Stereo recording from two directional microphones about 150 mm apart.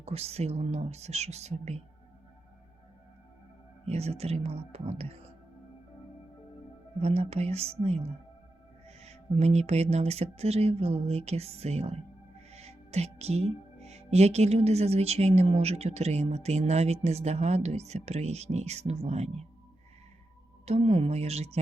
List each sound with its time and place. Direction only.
0.0 s speech: 45° right (ahead or behind)
3.8 s speech: 45° right (ahead or behind)
7.0 s speech: 45° right (ahead or behind)
20.7 s speech: 45° right (ahead or behind)